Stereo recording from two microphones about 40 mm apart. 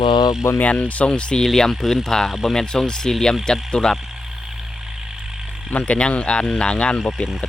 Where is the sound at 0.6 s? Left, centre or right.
Left.